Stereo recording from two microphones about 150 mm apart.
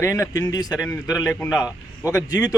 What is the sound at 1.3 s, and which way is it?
Speech, centre (ahead or behind).